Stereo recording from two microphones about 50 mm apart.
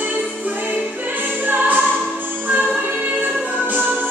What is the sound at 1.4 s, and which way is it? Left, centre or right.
Music, right.